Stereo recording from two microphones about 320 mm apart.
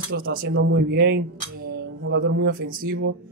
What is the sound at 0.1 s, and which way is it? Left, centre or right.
Speech, right.